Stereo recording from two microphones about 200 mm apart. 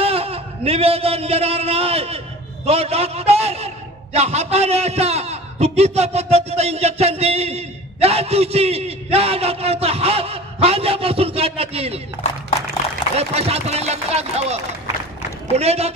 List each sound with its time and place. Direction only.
0.0 s a man's voice: 30° right (ahead or behind)
13.2 s a man's voice: 30° right (ahead or behind)